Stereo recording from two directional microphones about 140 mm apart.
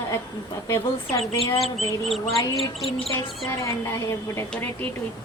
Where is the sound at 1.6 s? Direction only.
Centre (ahead or behind).